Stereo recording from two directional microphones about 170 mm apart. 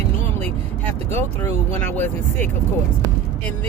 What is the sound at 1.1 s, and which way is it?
Speech, 10° left (ahead or behind).